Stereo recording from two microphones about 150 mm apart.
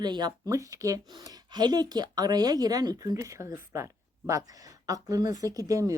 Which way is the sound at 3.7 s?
20° right (ahead or behind).